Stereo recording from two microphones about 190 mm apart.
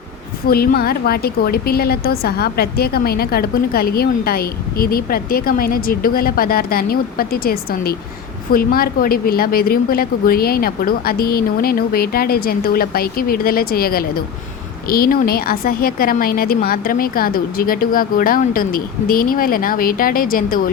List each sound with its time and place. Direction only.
0.4 s a woman's voice: 50° left (ahead or behind)